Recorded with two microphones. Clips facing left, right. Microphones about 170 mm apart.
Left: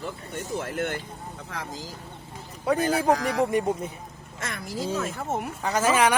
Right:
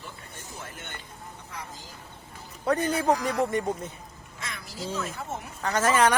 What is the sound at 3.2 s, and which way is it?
Speech, 90° left.